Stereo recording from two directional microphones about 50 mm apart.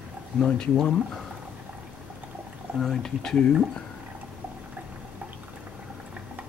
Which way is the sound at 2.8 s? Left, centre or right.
Centre.